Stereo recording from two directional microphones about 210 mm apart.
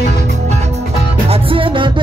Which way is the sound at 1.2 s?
25° right (ahead or behind).